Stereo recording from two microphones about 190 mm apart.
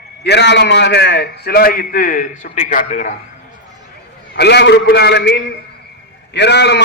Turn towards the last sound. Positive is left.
turn(degrees=65)  # may be behind; listen again after turning